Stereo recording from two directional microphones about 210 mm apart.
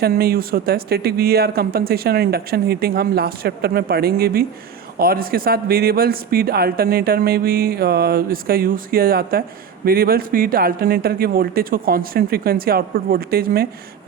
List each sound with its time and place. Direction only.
0.0 s speech: 45° right (ahead or behind)